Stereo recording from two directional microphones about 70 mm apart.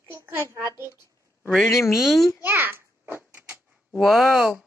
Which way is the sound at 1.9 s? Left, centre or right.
Centre.